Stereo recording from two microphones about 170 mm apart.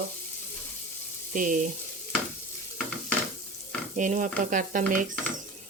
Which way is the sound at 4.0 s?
50° right (ahead or behind).